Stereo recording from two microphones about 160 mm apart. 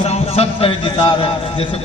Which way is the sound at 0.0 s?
40° left (ahead or behind).